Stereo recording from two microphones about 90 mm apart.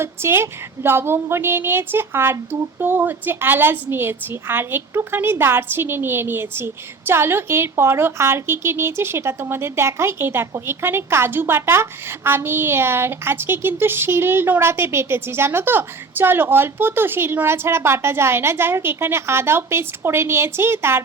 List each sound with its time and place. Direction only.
0.0 s a woman's voice: 30° right (ahead or behind)